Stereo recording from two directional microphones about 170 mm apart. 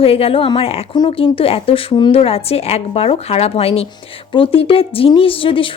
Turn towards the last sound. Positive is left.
turn(degrees=30)  # may be behind; listen again after turning